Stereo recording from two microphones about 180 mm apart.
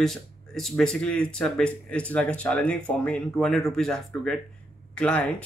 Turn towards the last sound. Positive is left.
turn(degrees=5)  # may be behind; listen again after turning